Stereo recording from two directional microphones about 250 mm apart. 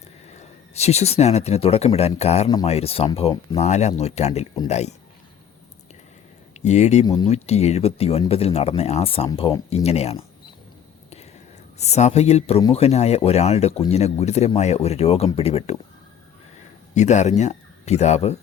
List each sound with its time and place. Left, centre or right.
0.3 s speech: left
6.7 s speech: left
7.0 s speech: centre
11.8 s speech: left
16.9 s speech: left